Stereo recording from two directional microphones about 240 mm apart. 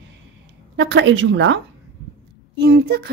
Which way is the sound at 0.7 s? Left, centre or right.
Right.